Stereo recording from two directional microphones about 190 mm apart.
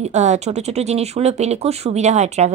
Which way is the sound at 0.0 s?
35° right (ahead or behind).